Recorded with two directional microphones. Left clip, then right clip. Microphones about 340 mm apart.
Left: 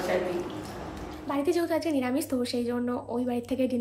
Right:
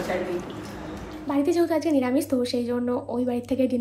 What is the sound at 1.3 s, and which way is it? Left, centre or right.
A woman's voice, centre.